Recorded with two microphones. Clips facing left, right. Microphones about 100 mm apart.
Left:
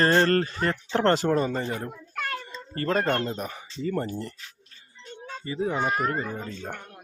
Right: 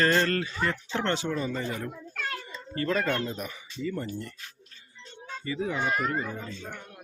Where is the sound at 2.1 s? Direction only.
55° left (ahead or behind).